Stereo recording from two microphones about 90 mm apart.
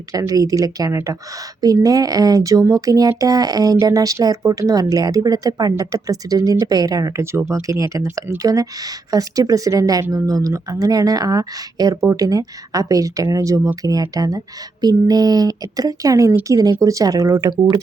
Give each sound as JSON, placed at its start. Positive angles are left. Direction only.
{"t": 0.1, "sound": "speech", "side_deg": -40}